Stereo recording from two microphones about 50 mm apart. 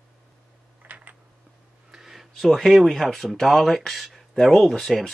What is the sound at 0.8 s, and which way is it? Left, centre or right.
Typing, right.